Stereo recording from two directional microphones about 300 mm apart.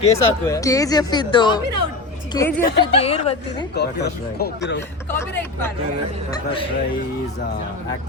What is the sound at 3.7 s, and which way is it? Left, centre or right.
Speech, left.